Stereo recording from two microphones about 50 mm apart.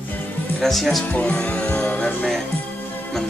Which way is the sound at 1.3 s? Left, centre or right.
Centre.